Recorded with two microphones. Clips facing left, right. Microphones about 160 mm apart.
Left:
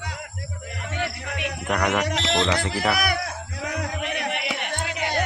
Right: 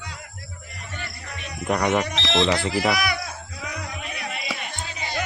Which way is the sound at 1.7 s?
20° right (ahead or behind).